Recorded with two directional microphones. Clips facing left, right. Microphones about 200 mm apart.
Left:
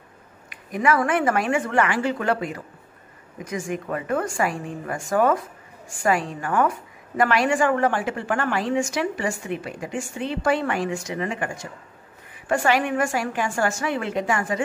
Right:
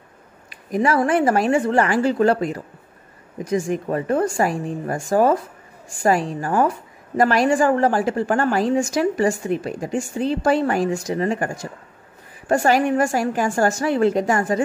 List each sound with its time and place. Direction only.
0.5 s a woman's voice: 35° right (ahead or behind)